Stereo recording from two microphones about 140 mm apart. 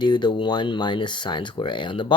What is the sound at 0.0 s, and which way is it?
Speech, 35° left (ahead or behind).